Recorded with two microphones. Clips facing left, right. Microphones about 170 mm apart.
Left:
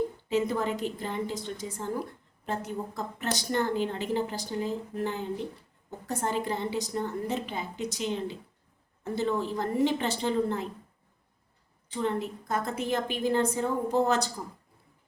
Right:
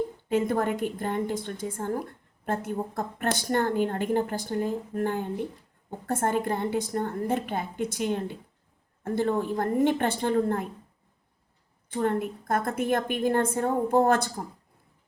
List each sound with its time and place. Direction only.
0.3 s a woman's voice: 55° right (ahead or behind)
11.9 s a woman's voice: 55° right (ahead or behind)